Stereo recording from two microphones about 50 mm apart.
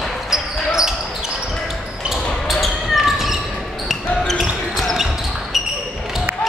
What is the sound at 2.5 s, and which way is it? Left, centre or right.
Basketball bounce, centre.